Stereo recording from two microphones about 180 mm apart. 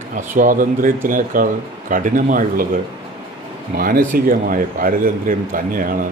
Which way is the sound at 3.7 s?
55° right (ahead or behind).